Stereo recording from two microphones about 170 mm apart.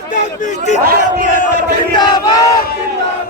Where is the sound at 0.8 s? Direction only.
60° right (ahead or behind).